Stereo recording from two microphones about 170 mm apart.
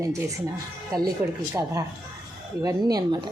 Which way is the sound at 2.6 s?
20° right (ahead or behind).